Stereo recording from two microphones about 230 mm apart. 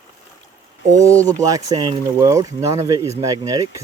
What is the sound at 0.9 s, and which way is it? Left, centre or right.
Speech, centre.